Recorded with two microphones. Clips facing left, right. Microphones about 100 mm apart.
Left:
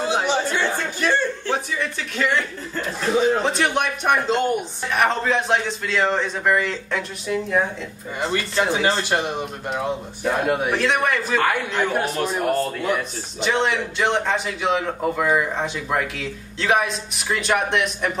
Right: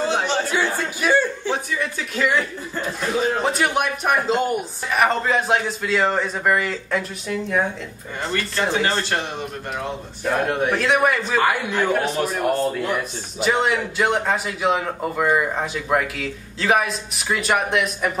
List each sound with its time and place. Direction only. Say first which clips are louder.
0.0 s chatter: even; 10° left (ahead or behind)
0.5 s a man's voice: right 1 dB; 10° right (ahead or behind)
9.1 s a man's voice: left 2 dB; 15° left (ahead or behind); by 18.1 s 5° right (ahead or behind)